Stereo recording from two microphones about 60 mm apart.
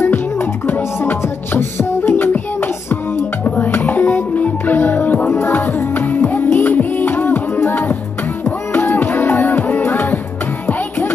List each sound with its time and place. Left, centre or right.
0.7 s music: left